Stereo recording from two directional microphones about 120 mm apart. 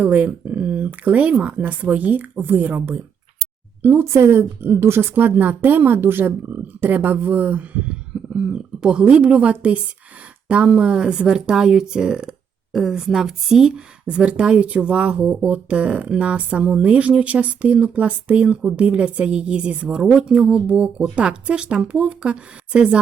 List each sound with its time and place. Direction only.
0.0 s speech: 10° right (ahead or behind)